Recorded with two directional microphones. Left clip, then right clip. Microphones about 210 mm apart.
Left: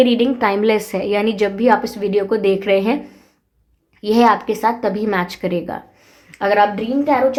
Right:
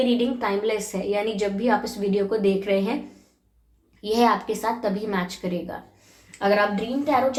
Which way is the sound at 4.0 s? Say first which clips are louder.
Left 7 dB; 45° left (ahead or behind).